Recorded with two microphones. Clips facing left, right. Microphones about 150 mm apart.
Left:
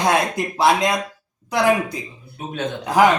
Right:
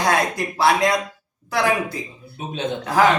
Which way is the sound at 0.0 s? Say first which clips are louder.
Left 1 dB; 20° left (ahead or behind).